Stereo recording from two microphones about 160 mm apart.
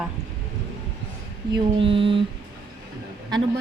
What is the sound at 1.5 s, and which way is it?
Mantra, 35° right (ahead or behind).